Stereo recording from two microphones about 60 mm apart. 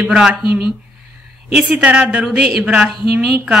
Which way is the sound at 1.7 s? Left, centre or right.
Right.